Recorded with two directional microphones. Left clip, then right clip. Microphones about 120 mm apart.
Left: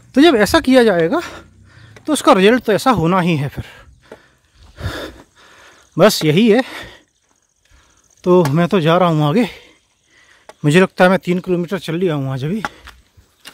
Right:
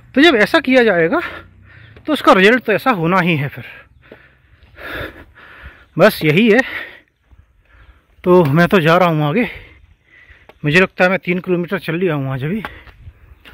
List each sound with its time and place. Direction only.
0.1 s speech: 35° left (ahead or behind)
0.9 s a sound: 25° left (ahead or behind)
2.2 s speech: 25° left (ahead or behind)
2.6 s speech: 45° left (ahead or behind)
3.1 s speech: 25° left (ahead or behind)
3.5 s a sound: 45° left (ahead or behind)
5.1 s a sound: 20° left (ahead or behind); by 7.1 s 40° left (ahead or behind)
8.5 s speech: 5° left (ahead or behind)
8.8 s speech: 25° left (ahead or behind)
10.6 s speech: 50° left (ahead or behind)
11.3 s speech: 15° left (ahead or behind)